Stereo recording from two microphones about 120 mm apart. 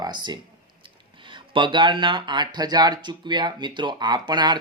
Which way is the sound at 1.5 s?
40° right (ahead or behind).